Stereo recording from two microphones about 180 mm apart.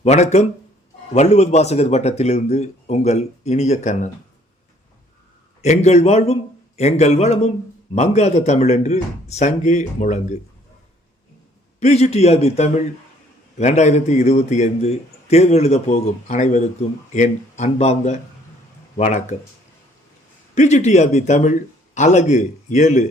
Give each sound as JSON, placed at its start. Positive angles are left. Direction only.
{"t": 0.0, "sound": "a man's voice", "side_deg": 40}
{"t": 5.6, "sound": "a man's voice", "side_deg": 40}
{"t": 11.8, "sound": "a man's voice", "side_deg": 40}
{"t": 20.6, "sound": "a man's voice", "side_deg": 40}